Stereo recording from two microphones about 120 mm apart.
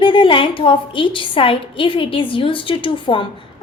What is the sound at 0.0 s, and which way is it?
A woman's voice, 45° left (ahead or behind).